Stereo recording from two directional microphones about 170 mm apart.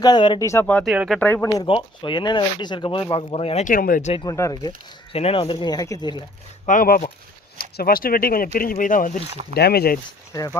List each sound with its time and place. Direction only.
0.0 s speech: 25° left (ahead or behind); by 1.2 s centre (ahead or behind)
1.2 s speech: 15° left (ahead or behind)
1.6 s speech: 30° left (ahead or behind)
3.7 s speech: 55° left (ahead or behind)
4.1 s speech: 20° left (ahead or behind)
5.1 s speech: 35° left (ahead or behind)
6.7 s speech: 55° left (ahead or behind)
9.3 s speech: 35° right (ahead or behind)
9.6 s speech: 70° left (ahead or behind)
10.3 s speech: 20° left (ahead or behind)